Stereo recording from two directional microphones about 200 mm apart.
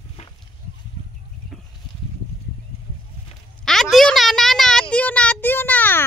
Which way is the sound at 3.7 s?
Centre (ahead or behind).